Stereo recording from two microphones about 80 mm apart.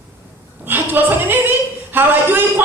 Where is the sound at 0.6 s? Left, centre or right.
Right.